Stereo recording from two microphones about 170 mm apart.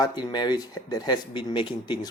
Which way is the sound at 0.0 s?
25° left (ahead or behind).